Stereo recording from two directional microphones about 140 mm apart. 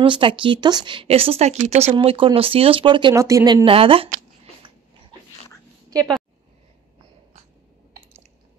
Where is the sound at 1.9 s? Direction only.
40° right (ahead or behind).